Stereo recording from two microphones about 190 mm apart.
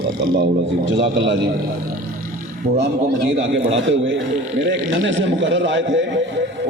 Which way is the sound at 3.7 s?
80° right.